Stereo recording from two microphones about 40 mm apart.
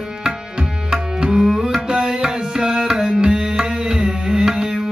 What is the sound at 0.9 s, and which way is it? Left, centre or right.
Tabla, centre.